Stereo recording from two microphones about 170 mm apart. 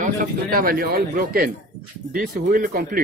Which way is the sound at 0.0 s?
55° right (ahead or behind).